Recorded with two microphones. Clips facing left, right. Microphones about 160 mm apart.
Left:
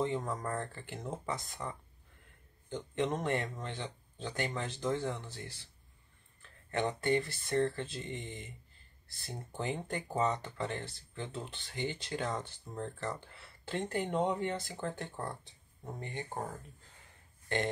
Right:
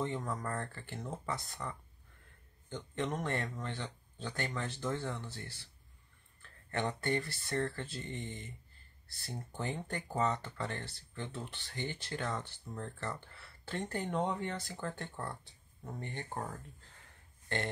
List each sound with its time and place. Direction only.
0.0 s speech: 20° left (ahead or behind)
6.7 s speech: 20° left (ahead or behind)